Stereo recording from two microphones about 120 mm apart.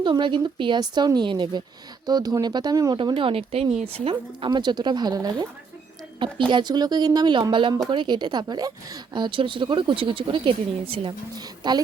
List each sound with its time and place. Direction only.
0.0 s speech: 40° right (ahead or behind)
2.9 s speech: 40° right (ahead or behind)
6.5 s a woman's voice: 40° right (ahead or behind)
11.3 s speech: 35° right (ahead or behind)